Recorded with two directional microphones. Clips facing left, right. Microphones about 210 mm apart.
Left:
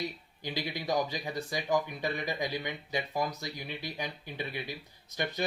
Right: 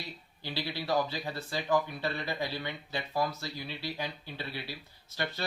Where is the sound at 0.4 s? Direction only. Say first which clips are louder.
Left 1 dB; 15° left (ahead or behind).